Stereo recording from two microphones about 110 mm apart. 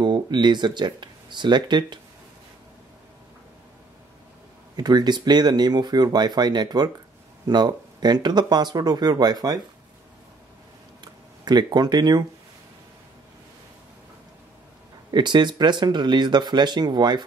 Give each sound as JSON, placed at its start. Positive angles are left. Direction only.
{"t": 0.0, "sound": "speech", "side_deg": -40}
{"t": 4.7, "sound": "speech", "side_deg": -40}
{"t": 11.4, "sound": "speech", "side_deg": -40}
{"t": 15.0, "sound": "speech", "side_deg": -45}